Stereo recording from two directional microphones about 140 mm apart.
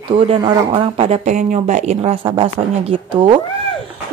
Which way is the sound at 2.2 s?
40° right (ahead or behind).